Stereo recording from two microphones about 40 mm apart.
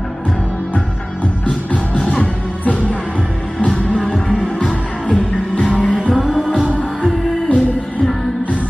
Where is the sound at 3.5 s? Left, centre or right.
Left.